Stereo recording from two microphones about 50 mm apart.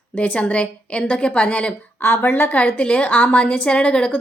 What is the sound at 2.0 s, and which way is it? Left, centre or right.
Speech, left.